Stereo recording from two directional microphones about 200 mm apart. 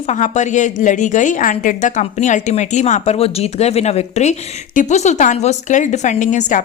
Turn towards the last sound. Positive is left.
turn(degrees=40)  # may be behind; listen again after turning